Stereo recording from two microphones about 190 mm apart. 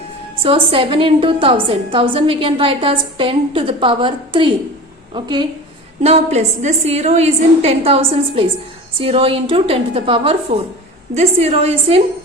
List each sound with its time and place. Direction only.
0.4 s a woman's voice: 30° right (ahead or behind)